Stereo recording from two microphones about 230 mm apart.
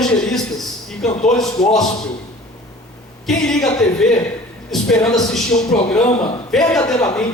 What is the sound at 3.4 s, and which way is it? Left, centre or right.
A man's voice, centre.